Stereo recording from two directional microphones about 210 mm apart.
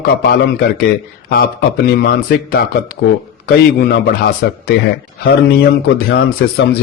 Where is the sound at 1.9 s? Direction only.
45° left (ahead or behind).